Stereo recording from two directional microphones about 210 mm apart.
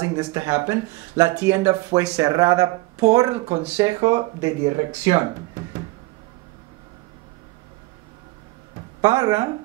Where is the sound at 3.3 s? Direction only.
35° right (ahead or behind).